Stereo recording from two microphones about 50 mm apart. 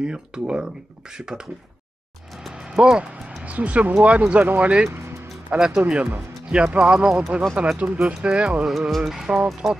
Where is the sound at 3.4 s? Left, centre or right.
Right.